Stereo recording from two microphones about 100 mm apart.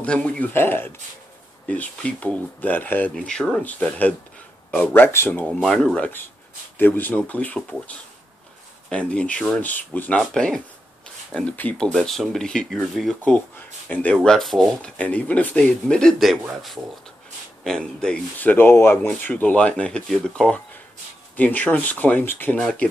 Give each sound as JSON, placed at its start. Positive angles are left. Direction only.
{"t": 0.0, "sound": "speech", "side_deg": 10}
{"t": 0.5, "sound": "speech", "side_deg": 20}
{"t": 5.5, "sound": "speech", "side_deg": 5}
{"t": 11.9, "sound": "speech", "side_deg": 0}
{"t": 13.8, "sound": "speech", "side_deg": 15}
{"t": 14.1, "sound": "speech", "side_deg": 5}
{"t": 22.6, "sound": "speech", "side_deg": 10}